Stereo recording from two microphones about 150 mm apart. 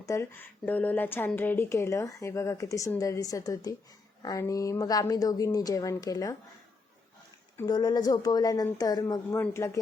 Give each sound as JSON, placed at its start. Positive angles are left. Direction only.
{"t": 0.0, "sound": "speech", "side_deg": 20}
{"t": 7.7, "sound": "speech", "side_deg": 25}